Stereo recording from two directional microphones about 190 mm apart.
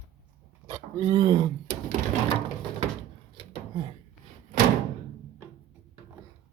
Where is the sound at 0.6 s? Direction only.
20° right (ahead or behind).